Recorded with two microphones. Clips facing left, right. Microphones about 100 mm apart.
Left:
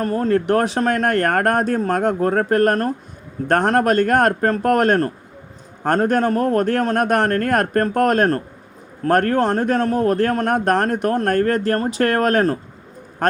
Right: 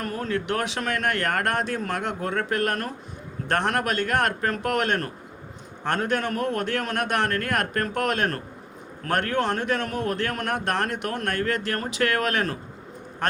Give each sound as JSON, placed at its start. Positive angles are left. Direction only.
{"t": 0.0, "sound": "a man's voice", "side_deg": 35}